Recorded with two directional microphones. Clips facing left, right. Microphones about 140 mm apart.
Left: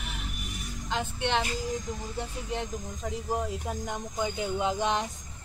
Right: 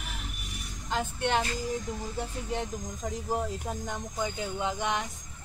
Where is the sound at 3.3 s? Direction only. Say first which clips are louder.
Even; 5° left (ahead or behind).